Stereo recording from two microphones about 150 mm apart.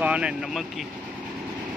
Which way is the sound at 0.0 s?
5° right (ahead or behind).